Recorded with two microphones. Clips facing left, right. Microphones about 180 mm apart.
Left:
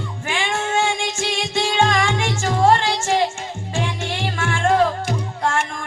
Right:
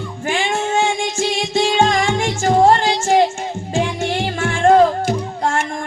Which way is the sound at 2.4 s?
40° right (ahead or behind).